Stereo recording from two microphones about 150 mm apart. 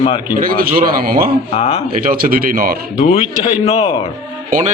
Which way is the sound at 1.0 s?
85° right.